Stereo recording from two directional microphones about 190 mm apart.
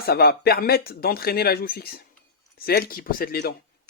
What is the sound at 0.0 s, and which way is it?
Speech, 55° left (ahead or behind).